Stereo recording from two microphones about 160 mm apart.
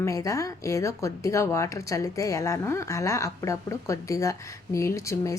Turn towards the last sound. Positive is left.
turn(degrees=20)  # may be behind; listen again after turning